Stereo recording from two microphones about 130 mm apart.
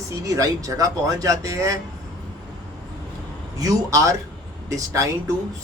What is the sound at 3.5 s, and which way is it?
Speech, 25° right (ahead or behind).